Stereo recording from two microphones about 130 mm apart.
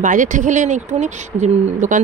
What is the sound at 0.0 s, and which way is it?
Speech, 80° right.